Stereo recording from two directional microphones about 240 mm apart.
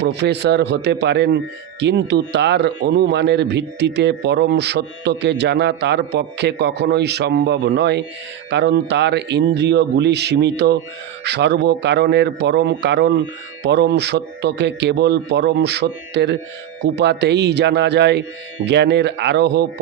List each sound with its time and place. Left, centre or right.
0.0 s speech: right